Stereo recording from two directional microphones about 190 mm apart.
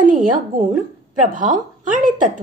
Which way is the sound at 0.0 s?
45° right (ahead or behind).